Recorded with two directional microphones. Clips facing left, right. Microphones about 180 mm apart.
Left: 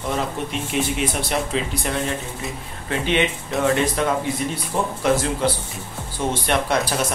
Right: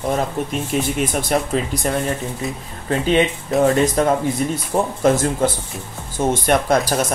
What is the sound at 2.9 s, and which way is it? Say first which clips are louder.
Speech: right 4 dB; 35° right (ahead or behind).